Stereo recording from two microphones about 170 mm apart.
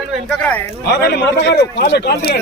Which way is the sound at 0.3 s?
5° left (ahead or behind).